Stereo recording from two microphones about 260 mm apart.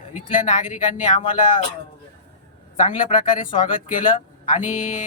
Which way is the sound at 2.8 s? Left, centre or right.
Left.